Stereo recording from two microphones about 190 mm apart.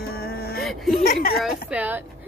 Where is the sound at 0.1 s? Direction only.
55° left (ahead or behind).